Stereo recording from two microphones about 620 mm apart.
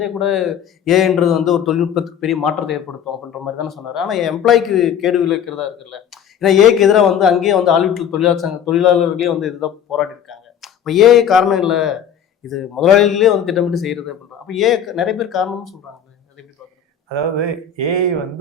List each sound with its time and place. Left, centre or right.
0.0 s speech: centre
17.1 s speech: right